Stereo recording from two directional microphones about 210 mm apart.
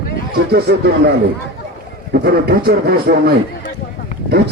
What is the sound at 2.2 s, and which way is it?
A man's voice, 50° right (ahead or behind).